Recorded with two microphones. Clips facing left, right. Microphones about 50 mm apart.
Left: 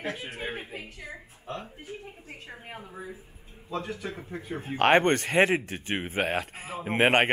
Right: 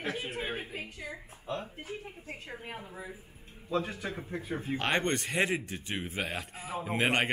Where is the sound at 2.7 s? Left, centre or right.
Left.